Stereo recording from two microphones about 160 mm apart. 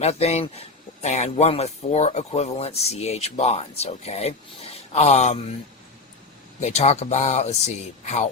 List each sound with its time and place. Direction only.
0.0 s speech: 40° left (ahead or behind)
6.6 s speech: 45° left (ahead or behind)